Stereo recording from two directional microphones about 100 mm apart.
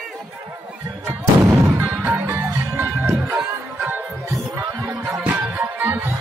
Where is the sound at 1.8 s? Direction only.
20° right (ahead or behind).